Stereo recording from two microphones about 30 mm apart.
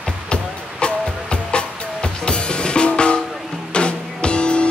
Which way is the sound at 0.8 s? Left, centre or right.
Left.